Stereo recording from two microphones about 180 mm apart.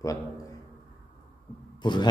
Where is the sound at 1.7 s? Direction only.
25° left (ahead or behind).